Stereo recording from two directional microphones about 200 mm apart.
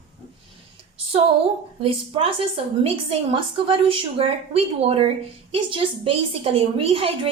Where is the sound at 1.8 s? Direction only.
30° right (ahead or behind).